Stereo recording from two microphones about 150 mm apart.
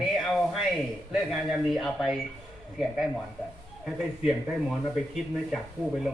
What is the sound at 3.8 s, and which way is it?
A man's voice, 5° right (ahead or behind).